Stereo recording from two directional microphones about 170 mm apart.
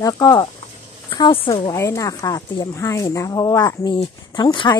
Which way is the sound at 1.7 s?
20° left (ahead or behind).